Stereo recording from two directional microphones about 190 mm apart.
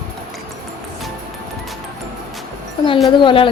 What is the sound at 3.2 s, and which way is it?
Speech, 25° left (ahead or behind).